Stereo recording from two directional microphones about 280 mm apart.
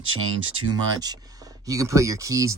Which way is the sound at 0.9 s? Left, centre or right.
Centre.